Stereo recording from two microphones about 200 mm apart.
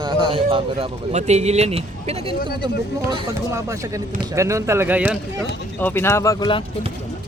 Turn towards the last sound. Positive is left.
turn(degrees=20)  # may be behind; listen again after turning